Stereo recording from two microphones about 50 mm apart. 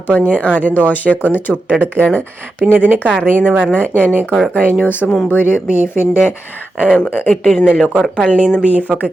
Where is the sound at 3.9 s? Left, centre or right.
Left.